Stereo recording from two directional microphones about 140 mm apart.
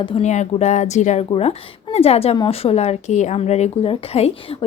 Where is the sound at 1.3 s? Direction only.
45° left (ahead or behind).